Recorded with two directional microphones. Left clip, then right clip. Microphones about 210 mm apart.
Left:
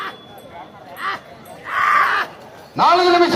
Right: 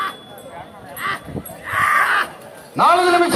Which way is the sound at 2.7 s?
55° left (ahead or behind).